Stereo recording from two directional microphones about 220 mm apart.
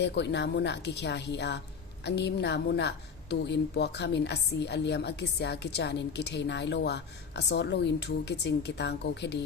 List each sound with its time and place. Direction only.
0.0 s a woman's voice: 50° left (ahead or behind)